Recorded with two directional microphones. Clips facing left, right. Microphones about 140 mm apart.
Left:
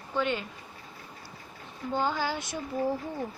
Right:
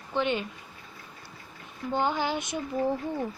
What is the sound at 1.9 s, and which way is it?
Speech, 20° right (ahead or behind).